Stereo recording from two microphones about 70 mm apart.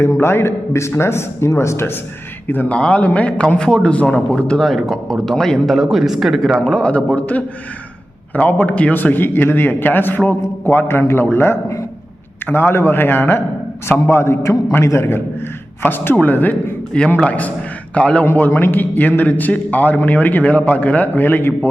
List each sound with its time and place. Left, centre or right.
0.0 s a man's voice: left
2.5 s a man's voice: left; by 6.6 s centre
6.6 s a man's voice: centre
18.3 s speech: left